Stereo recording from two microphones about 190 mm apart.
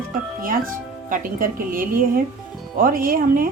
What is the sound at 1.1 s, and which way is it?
A woman's voice, 45° right (ahead or behind).